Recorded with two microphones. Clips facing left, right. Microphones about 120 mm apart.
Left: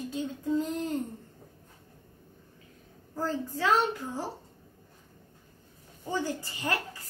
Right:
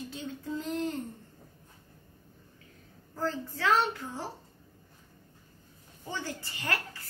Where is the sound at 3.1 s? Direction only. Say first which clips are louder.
Left 2 dB; 15° left (ahead or behind).